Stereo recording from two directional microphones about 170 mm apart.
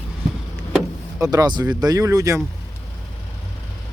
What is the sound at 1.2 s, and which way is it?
Speech, 20° right (ahead or behind).